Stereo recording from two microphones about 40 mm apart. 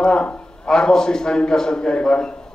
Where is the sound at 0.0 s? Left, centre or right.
Centre.